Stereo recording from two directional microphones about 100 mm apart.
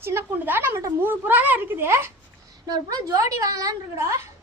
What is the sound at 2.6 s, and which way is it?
A woman's voice, 40° right (ahead or behind).